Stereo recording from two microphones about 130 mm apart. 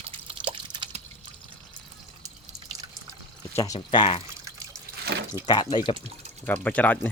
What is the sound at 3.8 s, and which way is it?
Speech, 45° left (ahead or behind).